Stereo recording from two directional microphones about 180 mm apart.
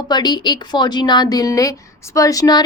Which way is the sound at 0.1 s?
25° left (ahead or behind).